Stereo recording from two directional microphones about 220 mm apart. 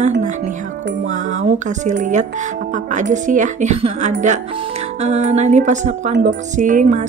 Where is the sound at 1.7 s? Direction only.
35° right (ahead or behind).